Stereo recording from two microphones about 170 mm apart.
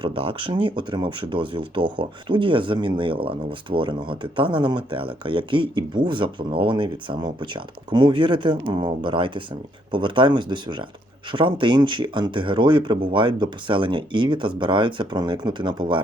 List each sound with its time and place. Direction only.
0.0 s speech: 30° right (ahead or behind)